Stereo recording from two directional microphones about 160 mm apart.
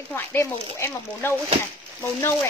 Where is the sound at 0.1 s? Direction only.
15° left (ahead or behind).